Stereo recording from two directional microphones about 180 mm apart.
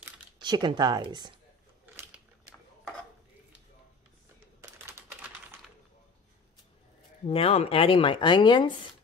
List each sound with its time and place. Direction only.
0.4 s speech: 25° right (ahead or behind)
4.6 s a sound: 10° right (ahead or behind)
7.2 s speech: 35° left (ahead or behind)